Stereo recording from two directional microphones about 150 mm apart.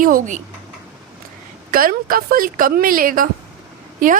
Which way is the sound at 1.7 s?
70° right (ahead or behind).